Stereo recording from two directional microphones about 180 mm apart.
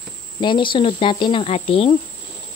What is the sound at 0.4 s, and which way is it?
Speech, 25° left (ahead or behind).